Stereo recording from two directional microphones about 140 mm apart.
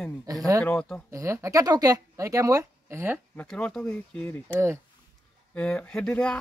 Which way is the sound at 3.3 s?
5° left (ahead or behind).